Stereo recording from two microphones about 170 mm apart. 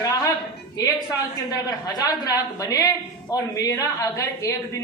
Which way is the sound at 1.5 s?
20° left (ahead or behind).